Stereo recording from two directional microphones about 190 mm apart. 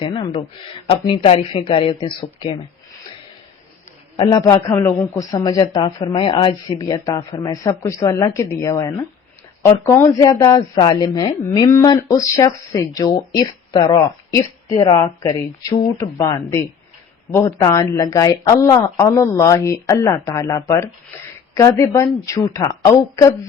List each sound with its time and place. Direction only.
0.0 s a man's voice: 25° left (ahead or behind)
4.2 s a man's voice: 20° left (ahead or behind)